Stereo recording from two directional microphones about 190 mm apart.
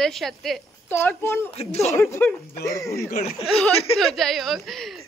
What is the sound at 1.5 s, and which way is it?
Speech, 35° left (ahead or behind).